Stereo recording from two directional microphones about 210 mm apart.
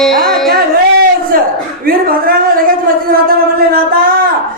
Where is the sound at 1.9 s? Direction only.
45° right (ahead or behind).